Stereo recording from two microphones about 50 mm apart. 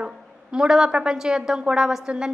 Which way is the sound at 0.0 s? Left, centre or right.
Centre.